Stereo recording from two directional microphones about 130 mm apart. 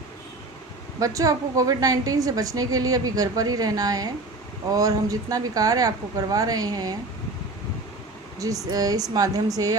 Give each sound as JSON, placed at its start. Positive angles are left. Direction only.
{"t": 0.9, "sound": "a woman's voice", "side_deg": -25}
{"t": 8.7, "sound": "a woman's voice", "side_deg": -30}